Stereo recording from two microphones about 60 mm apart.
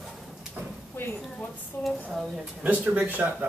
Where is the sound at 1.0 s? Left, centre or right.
Left.